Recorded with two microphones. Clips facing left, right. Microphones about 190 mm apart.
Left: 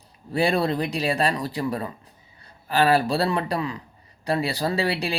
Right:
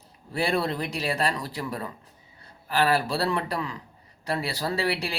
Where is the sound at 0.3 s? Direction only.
15° left (ahead or behind).